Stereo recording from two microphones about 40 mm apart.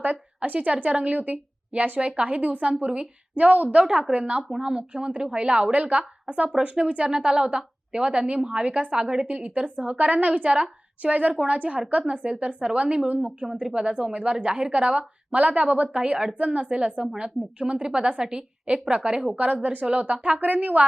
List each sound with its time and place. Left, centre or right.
0.0 s a woman's voice: right
8.9 s a woman's voice: right
9.3 s a woman's voice: right
13.4 s speech: centre
13.7 s a woman's voice: right